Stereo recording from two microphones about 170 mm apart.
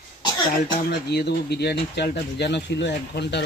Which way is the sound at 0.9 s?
75° left (ahead or behind).